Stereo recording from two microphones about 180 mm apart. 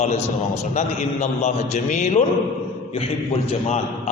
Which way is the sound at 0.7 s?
40° left (ahead or behind).